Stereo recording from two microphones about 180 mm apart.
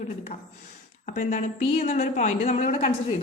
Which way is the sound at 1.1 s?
40° left (ahead or behind).